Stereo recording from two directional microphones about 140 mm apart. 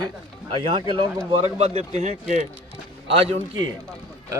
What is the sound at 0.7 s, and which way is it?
Speech, 35° right (ahead or behind).